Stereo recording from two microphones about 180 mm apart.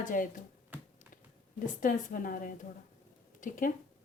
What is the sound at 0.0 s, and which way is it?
Speech, 45° left (ahead or behind).